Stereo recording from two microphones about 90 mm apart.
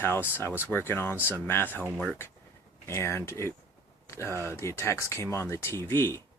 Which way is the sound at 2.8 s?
30° left (ahead or behind).